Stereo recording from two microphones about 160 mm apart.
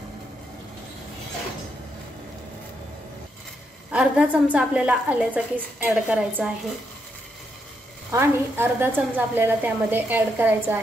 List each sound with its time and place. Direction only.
3.9 s a woman's voice: 5° right (ahead or behind)
8.1 s a woman's voice: 15° right (ahead or behind)